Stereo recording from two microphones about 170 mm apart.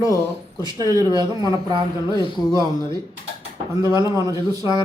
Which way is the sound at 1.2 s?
25° right (ahead or behind).